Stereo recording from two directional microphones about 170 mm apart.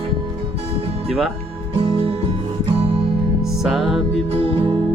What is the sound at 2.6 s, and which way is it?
Music, 35° right (ahead or behind).